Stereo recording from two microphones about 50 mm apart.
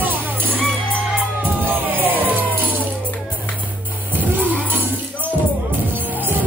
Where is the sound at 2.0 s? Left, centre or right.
Right.